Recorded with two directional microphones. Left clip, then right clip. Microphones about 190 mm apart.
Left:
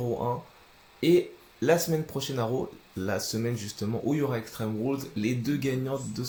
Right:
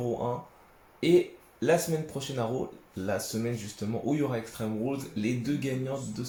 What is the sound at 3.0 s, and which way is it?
Speech, 40° left (ahead or behind).